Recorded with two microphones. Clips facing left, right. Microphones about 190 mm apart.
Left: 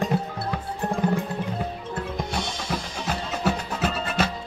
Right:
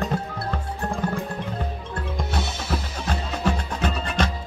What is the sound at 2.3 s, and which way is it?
Music, 5° right (ahead or behind).